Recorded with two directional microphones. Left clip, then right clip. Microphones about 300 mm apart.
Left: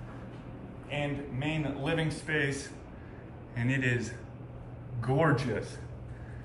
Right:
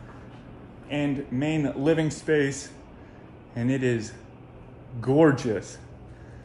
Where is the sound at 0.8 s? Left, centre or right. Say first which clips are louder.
Right 6 dB; right.